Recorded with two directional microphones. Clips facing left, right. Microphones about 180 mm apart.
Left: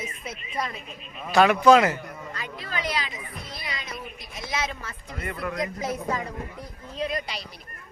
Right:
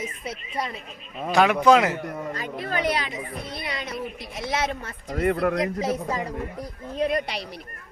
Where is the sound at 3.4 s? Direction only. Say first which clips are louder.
Right 2 dB; 60° right (ahead or behind).